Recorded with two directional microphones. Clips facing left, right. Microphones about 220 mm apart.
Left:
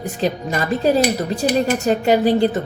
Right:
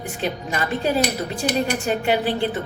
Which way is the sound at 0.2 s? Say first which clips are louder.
Left 5 dB; 35° left (ahead or behind).